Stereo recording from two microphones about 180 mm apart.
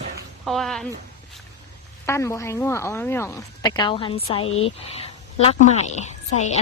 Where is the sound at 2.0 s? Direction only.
15° left (ahead or behind).